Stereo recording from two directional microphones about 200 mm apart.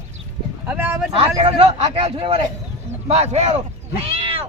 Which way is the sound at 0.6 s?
10° right (ahead or behind).